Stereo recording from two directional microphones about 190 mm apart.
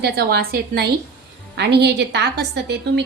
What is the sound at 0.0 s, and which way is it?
A woman's voice, 55° right (ahead or behind).